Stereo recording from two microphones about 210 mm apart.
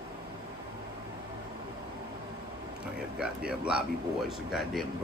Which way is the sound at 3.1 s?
5° right (ahead or behind).